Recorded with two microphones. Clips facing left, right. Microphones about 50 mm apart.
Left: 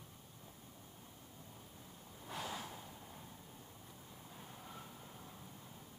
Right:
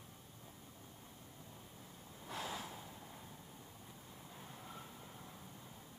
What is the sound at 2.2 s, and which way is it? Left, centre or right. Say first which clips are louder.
Snort: even; centre.